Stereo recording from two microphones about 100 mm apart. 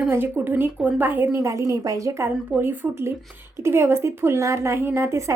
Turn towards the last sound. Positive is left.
turn(degrees=-25)  # may be behind; listen again after turning